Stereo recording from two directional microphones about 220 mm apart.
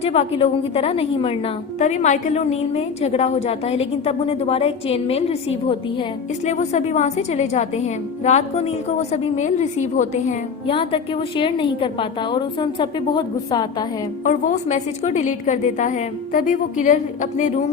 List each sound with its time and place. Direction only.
0.0 s a woman's voice: 25° left (ahead or behind)
14.3 s a woman's voice: 35° left (ahead or behind)